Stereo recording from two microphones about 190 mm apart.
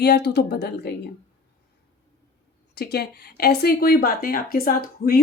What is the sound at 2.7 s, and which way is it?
Speech, 55° left (ahead or behind).